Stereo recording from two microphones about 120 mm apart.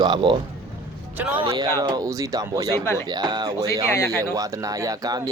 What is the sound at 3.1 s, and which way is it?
Speech, 35° right (ahead or behind).